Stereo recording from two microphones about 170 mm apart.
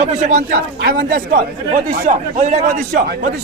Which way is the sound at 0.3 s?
55° right (ahead or behind).